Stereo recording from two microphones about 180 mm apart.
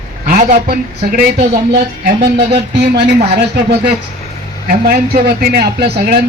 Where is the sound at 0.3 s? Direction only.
45° right (ahead or behind).